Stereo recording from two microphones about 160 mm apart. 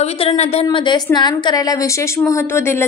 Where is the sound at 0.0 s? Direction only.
40° left (ahead or behind).